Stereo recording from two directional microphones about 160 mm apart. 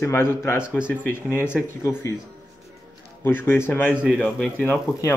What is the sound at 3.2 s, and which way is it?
Speech, 15° left (ahead or behind).